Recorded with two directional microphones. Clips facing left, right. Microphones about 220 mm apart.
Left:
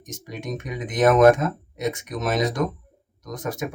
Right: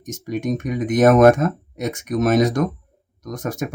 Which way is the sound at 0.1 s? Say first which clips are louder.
Right 8 dB; 45° right (ahead or behind).